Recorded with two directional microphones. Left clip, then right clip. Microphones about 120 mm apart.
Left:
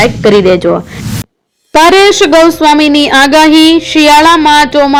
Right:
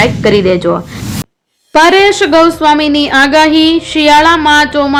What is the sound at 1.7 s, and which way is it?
A woman's voice, 50° left (ahead or behind).